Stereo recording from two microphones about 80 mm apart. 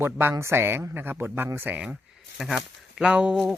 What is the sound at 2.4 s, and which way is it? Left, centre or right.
Speech, centre.